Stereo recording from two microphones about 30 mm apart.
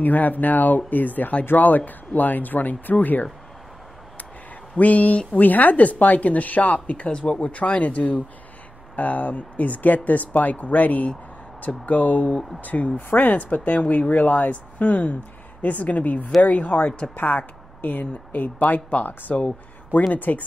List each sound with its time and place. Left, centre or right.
0.0 s speech: left
4.7 s speech: left
7.1 s speech: left
7.3 s speech: left
8.9 s speech: left
12.5 s speech: left
17.1 s speech: left
20.2 s speech: left